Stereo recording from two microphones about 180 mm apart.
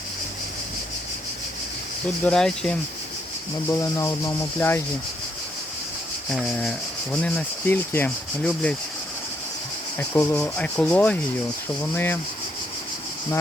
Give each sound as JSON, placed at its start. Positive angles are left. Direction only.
{"t": 2.2, "sound": "rub", "side_deg": 5}
{"t": 3.7, "sound": "speech", "side_deg": 15}
{"t": 6.3, "sound": "rub", "side_deg": 5}
{"t": 10.0, "sound": "speech", "side_deg": 10}